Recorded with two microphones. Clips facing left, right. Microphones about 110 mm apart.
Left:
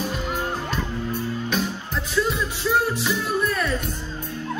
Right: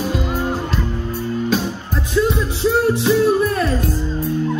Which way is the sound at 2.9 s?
30° right (ahead or behind).